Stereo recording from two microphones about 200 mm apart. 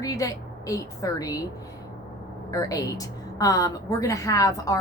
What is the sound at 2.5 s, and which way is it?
A woman's voice, 15° left (ahead or behind).